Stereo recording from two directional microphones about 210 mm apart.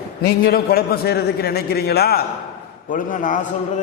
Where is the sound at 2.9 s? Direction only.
40° left (ahead or behind).